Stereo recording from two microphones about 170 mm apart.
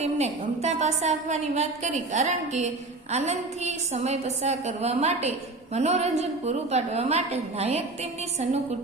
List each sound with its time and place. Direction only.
0.0 s a woman's voice: 40° right (ahead or behind)